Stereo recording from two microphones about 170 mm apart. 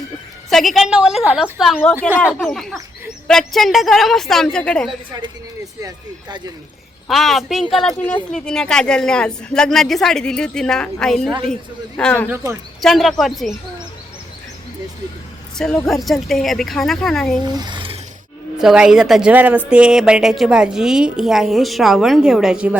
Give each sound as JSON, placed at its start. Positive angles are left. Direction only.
{"t": 0.5, "sound": "a woman's voice", "side_deg": 0}
{"t": 2.4, "sound": "a woman's voice", "side_deg": 0}
{"t": 5.8, "sound": "speech", "side_deg": -25}
{"t": 7.1, "sound": "a woman's voice", "side_deg": 0}
{"t": 15.5, "sound": "a woman's voice", "side_deg": 5}
{"t": 17.4, "sound": "speech", "side_deg": -25}
{"t": 18.6, "sound": "a woman's voice", "side_deg": -5}